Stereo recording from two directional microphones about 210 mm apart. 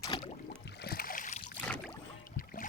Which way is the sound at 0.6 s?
50° left (ahead or behind).